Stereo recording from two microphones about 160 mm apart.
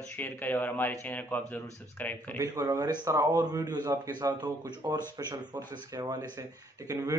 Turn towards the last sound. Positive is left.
turn(degrees=-20)  # may be behind; listen again after turning